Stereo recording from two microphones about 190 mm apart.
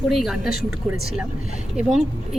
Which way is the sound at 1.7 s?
Centre (ahead or behind).